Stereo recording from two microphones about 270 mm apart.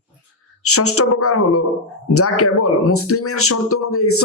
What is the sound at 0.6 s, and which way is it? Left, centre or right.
Speech, left.